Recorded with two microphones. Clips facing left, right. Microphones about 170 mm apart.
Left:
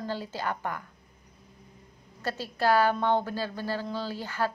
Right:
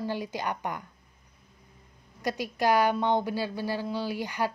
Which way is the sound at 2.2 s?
15° right (ahead or behind).